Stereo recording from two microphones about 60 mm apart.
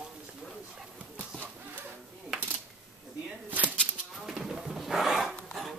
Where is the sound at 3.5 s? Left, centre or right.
Right.